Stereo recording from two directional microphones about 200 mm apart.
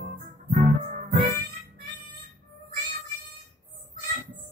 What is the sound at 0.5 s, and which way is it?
Music, 40° right (ahead or behind).